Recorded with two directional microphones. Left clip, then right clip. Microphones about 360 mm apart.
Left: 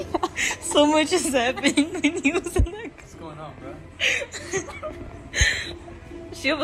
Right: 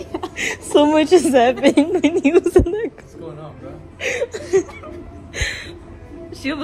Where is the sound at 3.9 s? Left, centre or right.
Centre.